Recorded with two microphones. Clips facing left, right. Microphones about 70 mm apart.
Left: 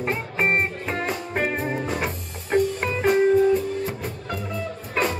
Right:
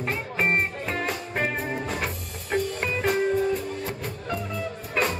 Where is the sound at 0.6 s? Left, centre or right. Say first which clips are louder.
Left 2 dB; centre.